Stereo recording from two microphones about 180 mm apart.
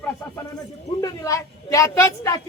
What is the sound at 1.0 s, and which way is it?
A woman's voice, 20° left (ahead or behind).